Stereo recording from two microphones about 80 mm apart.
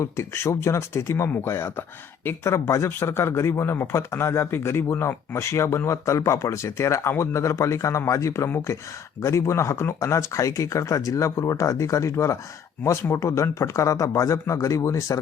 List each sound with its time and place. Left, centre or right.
0.0 s speech: left